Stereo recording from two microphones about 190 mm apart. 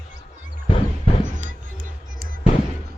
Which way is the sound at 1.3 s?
40° right (ahead or behind).